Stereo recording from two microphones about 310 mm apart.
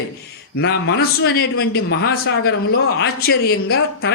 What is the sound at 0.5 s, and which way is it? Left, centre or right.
A man's voice, left.